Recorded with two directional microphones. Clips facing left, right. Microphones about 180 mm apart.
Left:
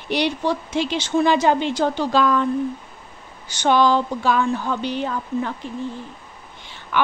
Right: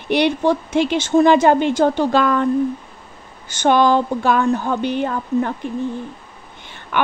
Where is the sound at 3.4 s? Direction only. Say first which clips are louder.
Right 3 dB; 50° right (ahead or behind).